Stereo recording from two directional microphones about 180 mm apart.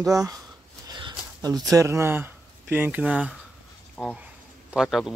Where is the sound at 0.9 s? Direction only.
25° right (ahead or behind).